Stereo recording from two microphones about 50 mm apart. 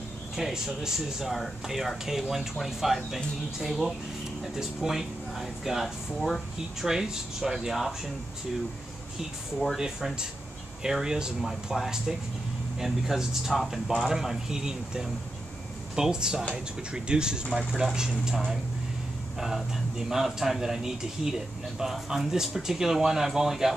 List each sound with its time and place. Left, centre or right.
0.4 s speech: centre
4.6 s speech: centre
9.8 s speech: centre
19.4 s speech: centre